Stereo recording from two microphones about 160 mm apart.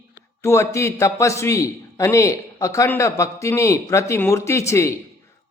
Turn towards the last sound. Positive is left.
turn(degrees=20)  # may be behind; listen again after turning